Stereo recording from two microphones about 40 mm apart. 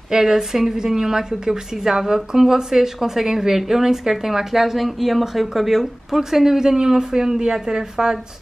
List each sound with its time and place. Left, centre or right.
0.1 s a woman's voice: centre